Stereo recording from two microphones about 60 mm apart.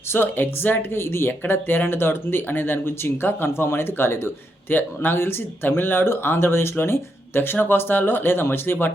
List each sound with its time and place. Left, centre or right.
0.1 s speech: left